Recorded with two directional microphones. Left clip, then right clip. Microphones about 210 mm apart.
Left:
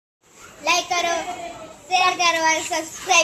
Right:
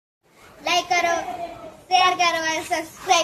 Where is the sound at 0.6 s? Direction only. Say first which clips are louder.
Even; 5° right (ahead or behind).